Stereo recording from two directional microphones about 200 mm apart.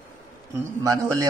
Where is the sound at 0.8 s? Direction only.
15° right (ahead or behind).